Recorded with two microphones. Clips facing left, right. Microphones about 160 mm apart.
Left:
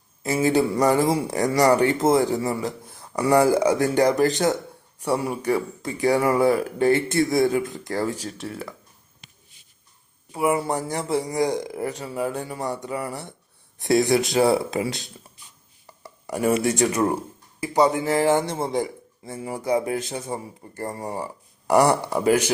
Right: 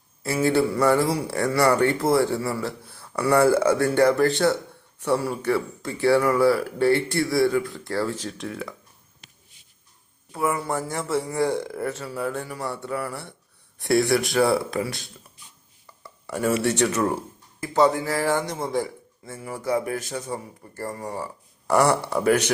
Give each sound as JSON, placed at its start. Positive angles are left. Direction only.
{"t": 0.2, "sound": "a man's voice", "side_deg": 20}
{"t": 10.3, "sound": "a man's voice", "side_deg": 15}
{"t": 16.2, "sound": "a man's voice", "side_deg": 15}